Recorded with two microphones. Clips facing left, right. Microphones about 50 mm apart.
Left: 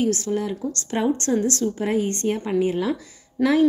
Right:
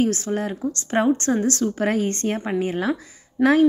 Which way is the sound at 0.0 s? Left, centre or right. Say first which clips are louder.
Right 1 dB; right.